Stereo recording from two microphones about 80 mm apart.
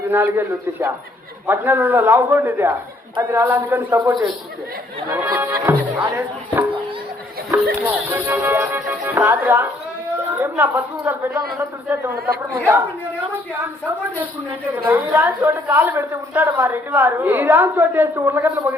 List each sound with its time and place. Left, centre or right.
0.1 s a woman's voice: right
5.1 s speech: right
7.8 s a woman's voice: right